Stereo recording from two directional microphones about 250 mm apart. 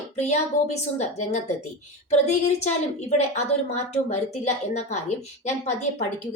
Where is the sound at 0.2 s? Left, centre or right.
Left.